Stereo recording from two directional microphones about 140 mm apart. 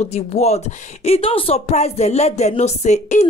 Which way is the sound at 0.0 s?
50° left (ahead or behind).